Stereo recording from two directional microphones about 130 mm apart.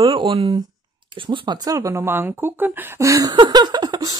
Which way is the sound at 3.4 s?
35° right (ahead or behind).